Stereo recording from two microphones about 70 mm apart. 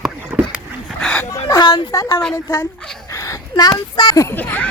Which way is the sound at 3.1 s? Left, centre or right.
Left.